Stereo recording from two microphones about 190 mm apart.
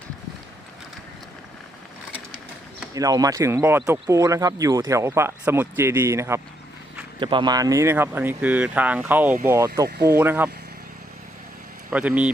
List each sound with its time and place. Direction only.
2.9 s speech: 20° right (ahead or behind)
7.2 s speech: 25° right (ahead or behind)
11.9 s speech: 5° right (ahead or behind)